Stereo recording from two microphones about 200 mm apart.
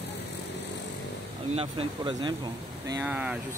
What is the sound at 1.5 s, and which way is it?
Speech, 30° right (ahead or behind).